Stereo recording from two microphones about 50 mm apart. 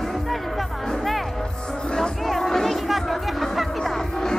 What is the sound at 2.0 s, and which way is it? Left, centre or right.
Crowd, centre.